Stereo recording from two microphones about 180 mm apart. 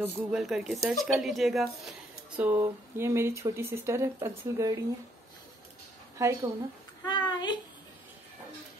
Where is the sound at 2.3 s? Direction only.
10° right (ahead or behind).